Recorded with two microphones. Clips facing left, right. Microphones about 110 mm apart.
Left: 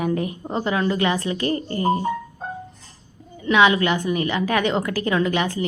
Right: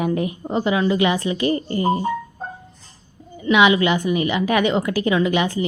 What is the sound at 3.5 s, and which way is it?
A woman's voice, 10° right (ahead or behind).